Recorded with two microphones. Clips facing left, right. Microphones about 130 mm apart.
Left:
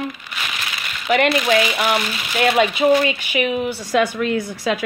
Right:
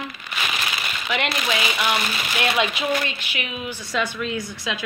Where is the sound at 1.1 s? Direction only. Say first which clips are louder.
Left 9 dB; 55° left (ahead or behind).